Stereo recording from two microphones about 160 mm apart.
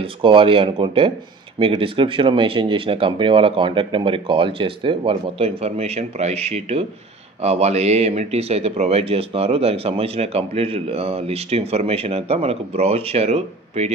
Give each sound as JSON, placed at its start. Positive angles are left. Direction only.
{"t": 0.0, "sound": "speech", "side_deg": -35}